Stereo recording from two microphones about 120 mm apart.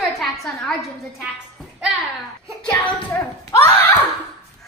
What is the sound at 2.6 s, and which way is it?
Hands, 10° left (ahead or behind).